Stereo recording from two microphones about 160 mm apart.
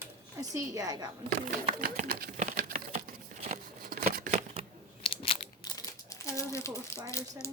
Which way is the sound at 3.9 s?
60° right (ahead or behind).